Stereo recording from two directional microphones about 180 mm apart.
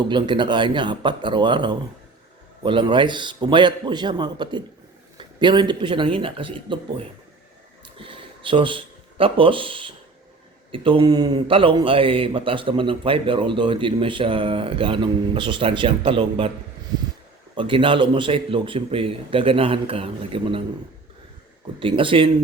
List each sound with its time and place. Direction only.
0.0 s a man's voice: 25° right (ahead or behind)
17.5 s a man's voice: 30° right (ahead or behind)
21.8 s a man's voice: 30° right (ahead or behind)